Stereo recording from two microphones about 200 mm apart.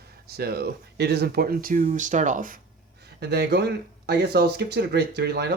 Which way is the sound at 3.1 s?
55° right (ahead or behind).